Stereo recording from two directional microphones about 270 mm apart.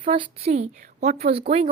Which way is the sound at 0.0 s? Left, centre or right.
Right.